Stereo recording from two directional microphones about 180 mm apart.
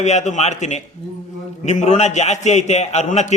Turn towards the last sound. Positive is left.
turn(degrees=40)  # may be behind; listen again after turning